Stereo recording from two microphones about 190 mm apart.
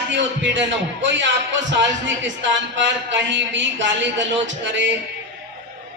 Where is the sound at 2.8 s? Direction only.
70° right (ahead or behind).